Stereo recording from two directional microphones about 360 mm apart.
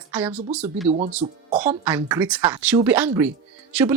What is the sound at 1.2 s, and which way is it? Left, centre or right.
Speech, centre.